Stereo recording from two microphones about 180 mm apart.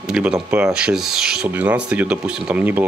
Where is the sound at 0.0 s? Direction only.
5° right (ahead or behind).